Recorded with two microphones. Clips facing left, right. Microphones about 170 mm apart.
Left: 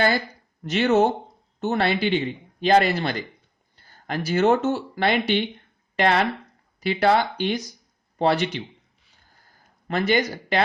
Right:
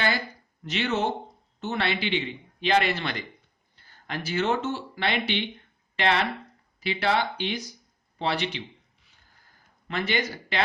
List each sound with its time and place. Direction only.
0.6 s a man's voice: 45° left (ahead or behind)
9.8 s a man's voice: 40° left (ahead or behind)